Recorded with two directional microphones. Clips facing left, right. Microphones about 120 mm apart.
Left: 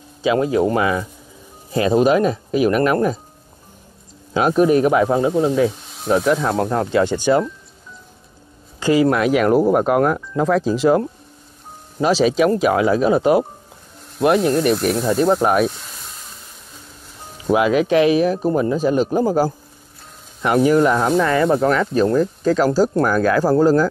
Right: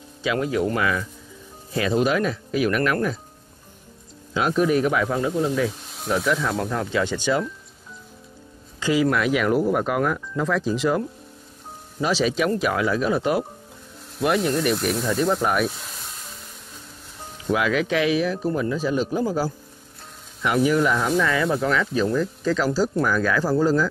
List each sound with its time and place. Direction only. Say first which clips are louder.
0.3 s speech: left 6 dB; 30° left (ahead or behind)
1.7 s speech: left 6 dB; 40° left (ahead or behind)
4.3 s speech: left 6 dB; 45° left (ahead or behind)
8.7 s speech: left 5 dB; 50° left (ahead or behind); by 14.5 s 35° left (ahead or behind)
14.8 s speech: left 5 dB; 50° left (ahead or behind)
15.7 s a sound: even; centre (ahead or behind)
17.6 s speech: left 7 dB; 55° left (ahead or behind)